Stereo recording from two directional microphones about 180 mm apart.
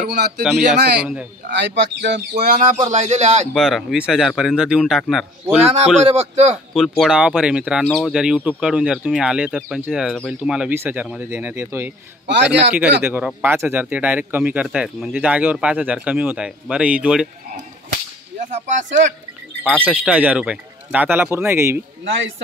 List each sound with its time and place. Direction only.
0.0 s speech: 65° right (ahead or behind)
0.4 s speech: 5° right (ahead or behind)
1.5 s speech: 75° right (ahead or behind)
2.4 s speech: 45° right (ahead or behind)
3.5 s speech: centre (ahead or behind)
5.6 s speech: 35° right (ahead or behind)
6.7 s speech: centre (ahead or behind)
13.0 s speech: 10° right (ahead or behind)
18.4 s speech: 45° right (ahead or behind)
19.6 s speech: 10° right (ahead or behind)